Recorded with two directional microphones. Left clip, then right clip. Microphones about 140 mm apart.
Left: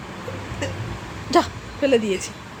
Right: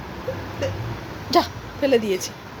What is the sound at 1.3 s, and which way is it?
Speech, 25° left (ahead or behind).